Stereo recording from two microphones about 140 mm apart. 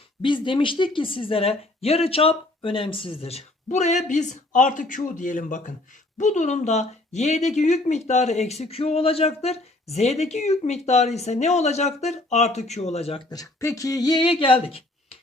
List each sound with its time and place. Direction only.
0.2 s speech: 35° left (ahead or behind)
13.3 s speech: 25° left (ahead or behind); by 14.8 s 40° left (ahead or behind)